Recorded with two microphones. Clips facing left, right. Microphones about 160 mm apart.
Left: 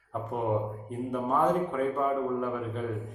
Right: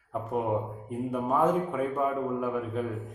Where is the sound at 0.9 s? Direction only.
5° right (ahead or behind).